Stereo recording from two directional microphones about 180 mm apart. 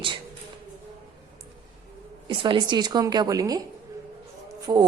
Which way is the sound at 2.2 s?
25° right (ahead or behind).